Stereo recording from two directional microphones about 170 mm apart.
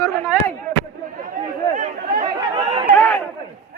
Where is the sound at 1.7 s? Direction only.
45° right (ahead or behind).